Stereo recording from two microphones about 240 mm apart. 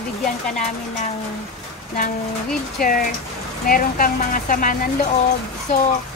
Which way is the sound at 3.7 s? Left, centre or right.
Left.